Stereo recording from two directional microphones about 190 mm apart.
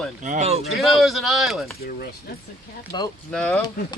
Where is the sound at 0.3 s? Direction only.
35° right (ahead or behind).